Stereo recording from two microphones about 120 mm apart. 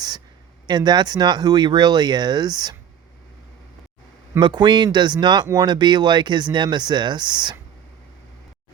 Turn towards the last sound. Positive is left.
turn(degrees=-35)  # may be behind; listen again after turning